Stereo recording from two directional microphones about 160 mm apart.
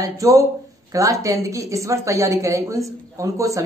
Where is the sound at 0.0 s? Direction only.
20° right (ahead or behind).